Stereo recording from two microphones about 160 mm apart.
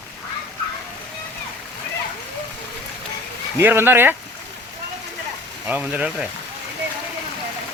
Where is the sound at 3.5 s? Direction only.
15° right (ahead or behind).